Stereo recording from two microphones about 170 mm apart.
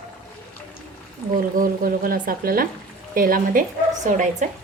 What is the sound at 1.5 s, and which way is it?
Speech, 55° right (ahead or behind).